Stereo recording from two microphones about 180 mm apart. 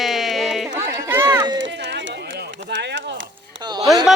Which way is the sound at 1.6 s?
75° right (ahead or behind).